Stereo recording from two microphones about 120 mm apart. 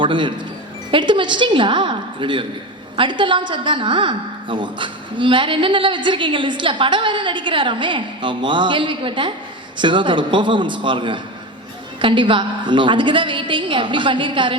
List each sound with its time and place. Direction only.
0.0 s a woman's voice: 40° right (ahead or behind)